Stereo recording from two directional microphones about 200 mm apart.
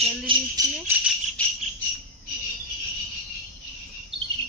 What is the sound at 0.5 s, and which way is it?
Jingle bell, 10° right (ahead or behind).